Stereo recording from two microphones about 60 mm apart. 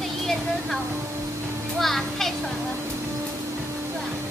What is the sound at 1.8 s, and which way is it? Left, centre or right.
Speech, centre.